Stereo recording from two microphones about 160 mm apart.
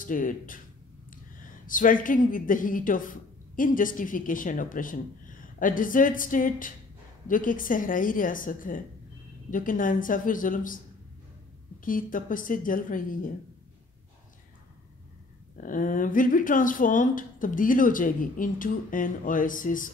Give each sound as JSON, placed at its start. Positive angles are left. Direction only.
{"t": 0.0, "sound": "a man's voice", "side_deg": 55}
{"t": 1.7, "sound": "a man's voice", "side_deg": 55}
{"t": 11.8, "sound": "a man's voice", "side_deg": 60}
{"t": 15.5, "sound": "a man's voice", "side_deg": 55}